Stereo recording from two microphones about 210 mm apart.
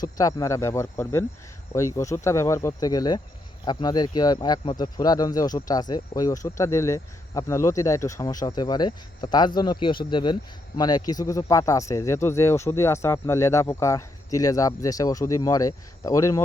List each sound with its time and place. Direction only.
0.0 s speech: 20° left (ahead or behind)